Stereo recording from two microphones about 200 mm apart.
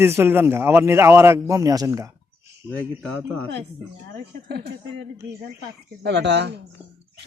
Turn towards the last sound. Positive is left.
turn(degrees=-60)  # may be behind; listen again after turning